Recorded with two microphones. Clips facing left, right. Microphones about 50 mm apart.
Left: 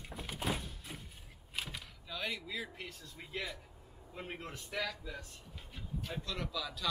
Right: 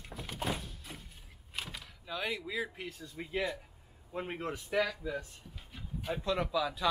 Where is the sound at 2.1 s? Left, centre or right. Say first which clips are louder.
Right 4 dB; centre.